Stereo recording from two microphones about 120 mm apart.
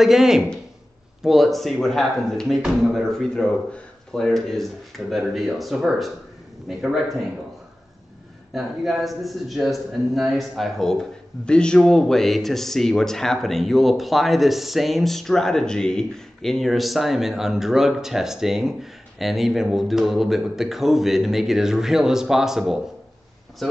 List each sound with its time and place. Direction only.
0.0 s a man's voice: 5° right (ahead or behind)
8.5 s a man's voice: centre (ahead or behind)